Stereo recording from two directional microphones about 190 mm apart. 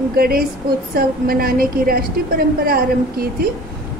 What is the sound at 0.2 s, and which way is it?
A woman's voice, 55° right (ahead or behind).